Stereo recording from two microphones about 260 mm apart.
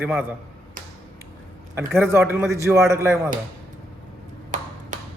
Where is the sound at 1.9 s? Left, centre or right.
Centre.